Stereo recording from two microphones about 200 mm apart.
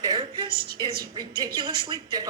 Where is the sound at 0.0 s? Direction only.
20° right (ahead or behind).